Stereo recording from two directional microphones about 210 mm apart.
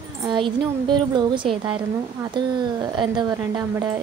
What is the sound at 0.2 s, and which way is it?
A woman's voice, 20° right (ahead or behind).